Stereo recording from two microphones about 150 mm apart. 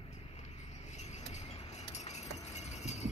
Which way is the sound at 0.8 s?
50° left (ahead or behind).